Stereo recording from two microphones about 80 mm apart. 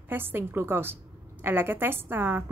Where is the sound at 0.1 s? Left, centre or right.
Right.